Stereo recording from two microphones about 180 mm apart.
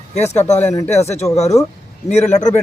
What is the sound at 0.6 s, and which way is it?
Speech, 15° left (ahead or behind).